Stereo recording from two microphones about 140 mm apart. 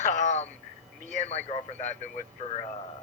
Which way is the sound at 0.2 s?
55° left (ahead or behind).